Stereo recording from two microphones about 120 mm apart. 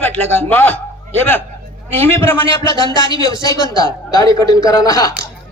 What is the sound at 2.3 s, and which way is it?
Speech, 20° left (ahead or behind).